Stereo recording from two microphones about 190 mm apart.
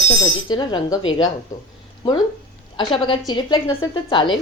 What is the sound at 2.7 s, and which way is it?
Speech, 25° left (ahead or behind).